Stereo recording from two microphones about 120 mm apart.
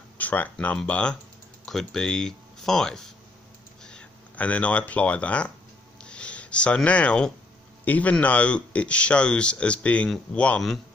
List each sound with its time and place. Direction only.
0.2 s speech: 15° left (ahead or behind)
6.0 s a sound: 10° left (ahead or behind)
7.8 s speech: 15° left (ahead or behind)